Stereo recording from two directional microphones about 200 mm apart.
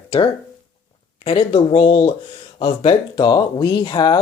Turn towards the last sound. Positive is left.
turn(degrees=20)  # may be behind; listen again after turning